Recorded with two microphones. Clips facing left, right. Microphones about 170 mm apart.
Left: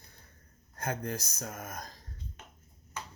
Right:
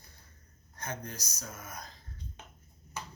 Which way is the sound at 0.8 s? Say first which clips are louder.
Left 6 dB; 55° left (ahead or behind).